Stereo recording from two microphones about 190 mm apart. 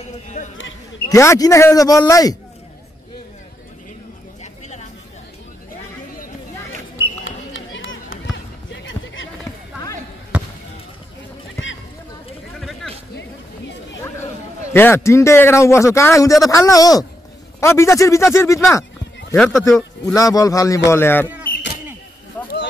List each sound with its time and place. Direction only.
0.4 s speech: 40° left (ahead or behind)
1.0 s a man's voice: 15° left (ahead or behind)
4.4 s a sound: 35° left (ahead or behind)
7.2 s run: 90° left
8.8 s a sound: 80° left
10.3 s basketball bounce: 5° right (ahead or behind)
12.5 s a sound: centre (ahead or behind)
14.7 s a man's voice: 10° left (ahead or behind)
19.3 s speech: 5° left (ahead or behind)
20.2 s a man's voice: 20° left (ahead or behind)